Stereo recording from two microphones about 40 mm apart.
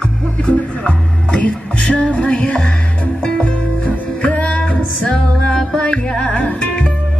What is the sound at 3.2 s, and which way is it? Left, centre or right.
Music, left.